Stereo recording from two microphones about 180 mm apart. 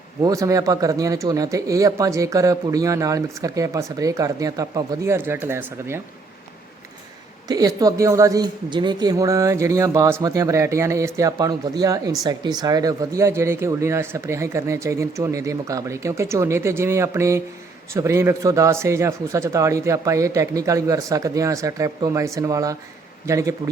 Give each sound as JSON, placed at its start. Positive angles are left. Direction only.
{"t": 0.2, "sound": "speech", "side_deg": -20}
{"t": 7.4, "sound": "speech", "side_deg": -20}